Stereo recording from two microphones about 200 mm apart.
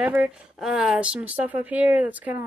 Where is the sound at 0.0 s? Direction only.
5° right (ahead or behind).